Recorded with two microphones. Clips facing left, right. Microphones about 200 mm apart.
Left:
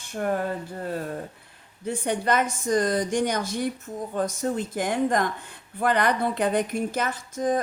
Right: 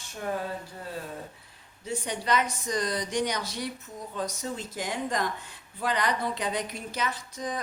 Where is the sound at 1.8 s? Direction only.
55° left (ahead or behind).